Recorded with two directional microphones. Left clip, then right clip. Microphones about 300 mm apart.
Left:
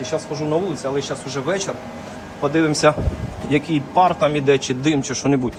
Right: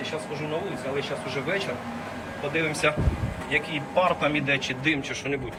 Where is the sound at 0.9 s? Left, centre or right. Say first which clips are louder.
Left 5 dB; centre.